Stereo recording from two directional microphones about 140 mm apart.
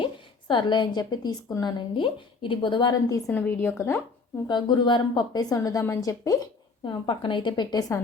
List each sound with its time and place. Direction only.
0.0 s a woman's voice: 35° left (ahead or behind)
3.3 s a woman's voice: 10° left (ahead or behind)
4.4 s a woman's voice: 35° left (ahead or behind)
6.8 s a woman's voice: 35° left (ahead or behind)